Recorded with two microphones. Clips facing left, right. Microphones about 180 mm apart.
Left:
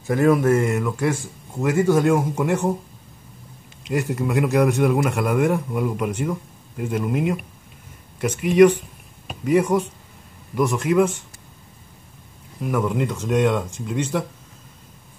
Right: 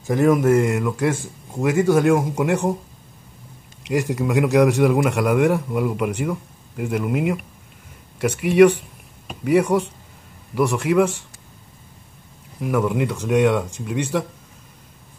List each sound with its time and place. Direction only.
0.0 s speech: 10° right (ahead or behind)
3.9 s speech: 10° right (ahead or behind)
12.5 s speech: 10° right (ahead or behind)